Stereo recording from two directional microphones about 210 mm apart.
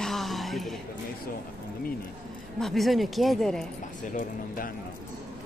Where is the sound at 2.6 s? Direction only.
Centre (ahead or behind).